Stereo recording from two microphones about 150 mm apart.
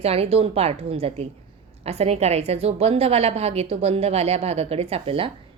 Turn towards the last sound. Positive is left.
turn(degrees=-40)  # may be behind; listen again after turning